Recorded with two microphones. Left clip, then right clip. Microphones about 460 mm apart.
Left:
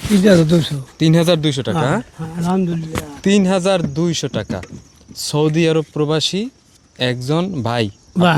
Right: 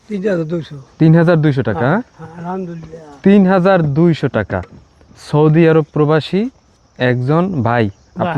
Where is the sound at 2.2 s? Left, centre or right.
Left.